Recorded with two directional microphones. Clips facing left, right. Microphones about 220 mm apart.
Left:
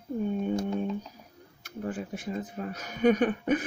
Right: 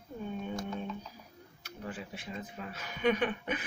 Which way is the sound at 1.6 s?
50° left (ahead or behind).